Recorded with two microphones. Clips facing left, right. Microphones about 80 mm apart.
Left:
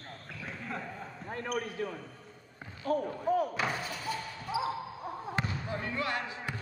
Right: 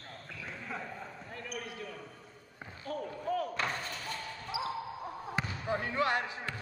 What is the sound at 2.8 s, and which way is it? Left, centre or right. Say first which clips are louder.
Basketball bounce: left 7 dB; left.